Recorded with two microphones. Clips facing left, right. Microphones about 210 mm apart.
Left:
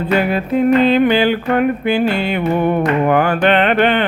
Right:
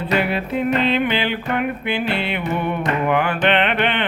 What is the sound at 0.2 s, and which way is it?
Music, 45° left (ahead or behind).